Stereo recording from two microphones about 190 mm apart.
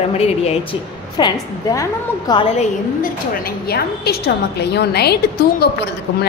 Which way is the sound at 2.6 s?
50° left (ahead or behind).